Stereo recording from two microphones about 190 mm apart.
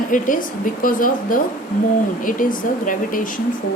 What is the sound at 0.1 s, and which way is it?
A woman's voice, 45° left (ahead or behind).